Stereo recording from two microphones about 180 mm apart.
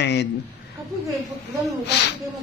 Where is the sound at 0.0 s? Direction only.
70° left (ahead or behind).